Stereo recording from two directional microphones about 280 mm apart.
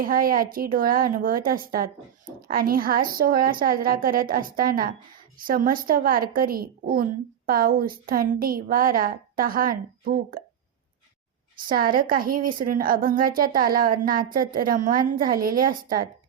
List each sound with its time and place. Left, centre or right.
0.0 s a woman's voice: right
11.6 s a woman's voice: right